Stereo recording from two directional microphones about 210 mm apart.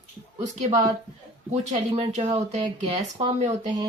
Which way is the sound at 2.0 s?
30° right (ahead or behind).